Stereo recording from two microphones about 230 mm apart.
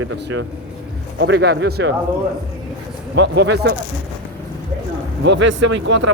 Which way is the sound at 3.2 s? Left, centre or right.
Right.